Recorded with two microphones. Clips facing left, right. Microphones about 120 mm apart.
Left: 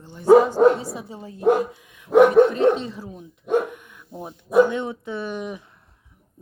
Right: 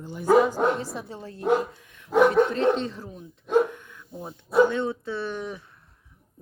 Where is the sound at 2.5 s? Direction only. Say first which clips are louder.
Left 4 dB; 5° left (ahead or behind).